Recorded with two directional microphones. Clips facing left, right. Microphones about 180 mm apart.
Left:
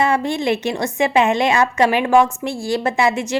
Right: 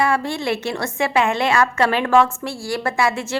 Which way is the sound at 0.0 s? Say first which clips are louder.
Left 2 dB; 20° left (ahead or behind).